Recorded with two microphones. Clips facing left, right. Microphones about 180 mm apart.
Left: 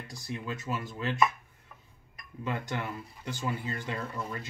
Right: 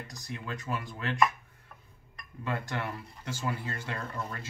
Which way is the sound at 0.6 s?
25° left (ahead or behind).